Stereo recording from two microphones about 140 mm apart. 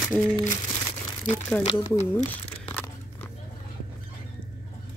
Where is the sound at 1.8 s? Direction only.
20° left (ahead or behind).